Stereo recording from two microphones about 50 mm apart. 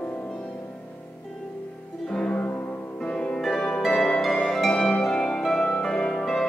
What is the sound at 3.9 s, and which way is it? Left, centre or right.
Harp, centre.